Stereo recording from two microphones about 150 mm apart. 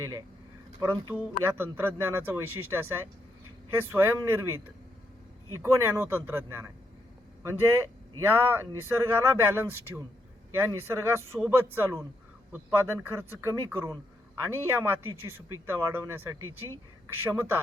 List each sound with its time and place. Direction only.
0.8 s speech: 15° right (ahead or behind)